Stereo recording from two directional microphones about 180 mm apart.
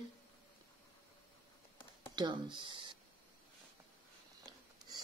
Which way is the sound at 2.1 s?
25° right (ahead or behind).